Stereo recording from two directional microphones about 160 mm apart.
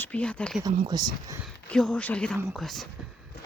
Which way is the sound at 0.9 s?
25° right (ahead or behind).